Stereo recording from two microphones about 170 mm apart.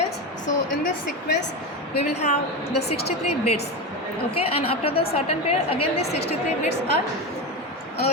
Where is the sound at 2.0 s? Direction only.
40° left (ahead or behind).